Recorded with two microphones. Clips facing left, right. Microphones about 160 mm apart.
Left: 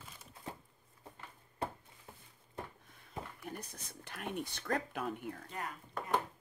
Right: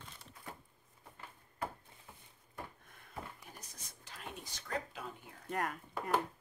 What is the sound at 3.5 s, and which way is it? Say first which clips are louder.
Speech: left 9 dB; 60° left (ahead or behind).